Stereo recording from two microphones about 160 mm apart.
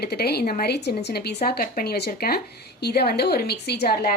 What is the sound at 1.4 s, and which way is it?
A woman's voice, 70° left (ahead or behind).